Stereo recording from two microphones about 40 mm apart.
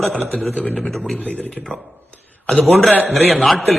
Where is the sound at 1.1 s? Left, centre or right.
Left.